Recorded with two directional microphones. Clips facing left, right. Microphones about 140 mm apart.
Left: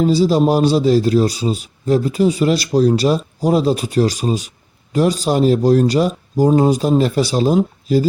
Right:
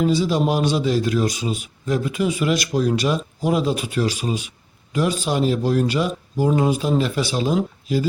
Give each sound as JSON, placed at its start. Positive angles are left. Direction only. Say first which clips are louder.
{"t": 0.0, "sound": "a man's voice", "louder": "left 5 dB", "side_deg": 35}